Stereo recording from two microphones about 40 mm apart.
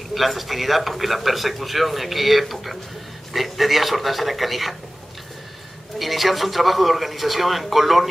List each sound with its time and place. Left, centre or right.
0.1 s a man's voice: centre
5.9 s a man's voice: centre